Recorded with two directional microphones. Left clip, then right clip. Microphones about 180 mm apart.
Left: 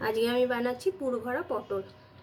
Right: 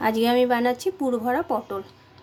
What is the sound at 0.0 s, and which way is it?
A woman's voice, 45° right (ahead or behind).